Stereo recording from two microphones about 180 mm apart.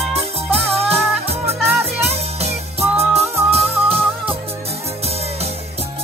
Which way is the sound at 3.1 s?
35° right (ahead or behind).